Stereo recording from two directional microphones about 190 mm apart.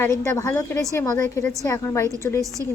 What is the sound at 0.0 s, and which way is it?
Speech, 15° left (ahead or behind).